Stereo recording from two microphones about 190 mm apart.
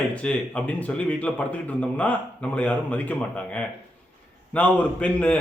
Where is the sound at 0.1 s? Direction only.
5° left (ahead or behind).